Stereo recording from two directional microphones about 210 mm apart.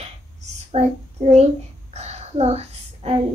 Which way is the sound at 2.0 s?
30° right (ahead or behind).